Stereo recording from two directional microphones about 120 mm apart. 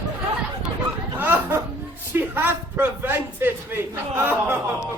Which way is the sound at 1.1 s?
15° right (ahead or behind).